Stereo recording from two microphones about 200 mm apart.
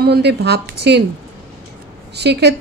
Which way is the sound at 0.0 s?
55° right (ahead or behind).